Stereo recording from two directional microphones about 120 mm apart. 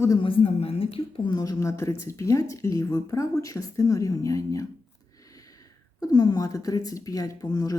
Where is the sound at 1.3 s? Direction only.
30° left (ahead or behind).